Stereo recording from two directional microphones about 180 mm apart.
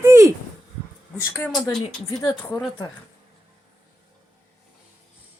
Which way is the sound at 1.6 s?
20° left (ahead or behind).